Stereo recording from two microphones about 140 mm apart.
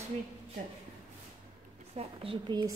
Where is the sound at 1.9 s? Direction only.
45° right (ahead or behind).